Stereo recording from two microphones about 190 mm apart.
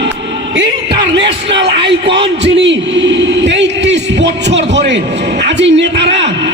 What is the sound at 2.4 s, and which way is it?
A man's voice, 65° right (ahead or behind).